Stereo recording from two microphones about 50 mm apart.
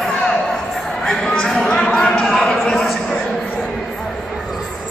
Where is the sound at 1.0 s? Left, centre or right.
Centre.